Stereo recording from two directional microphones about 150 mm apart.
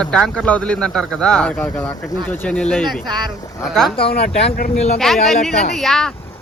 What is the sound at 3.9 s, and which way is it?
Speech, 40° left (ahead or behind).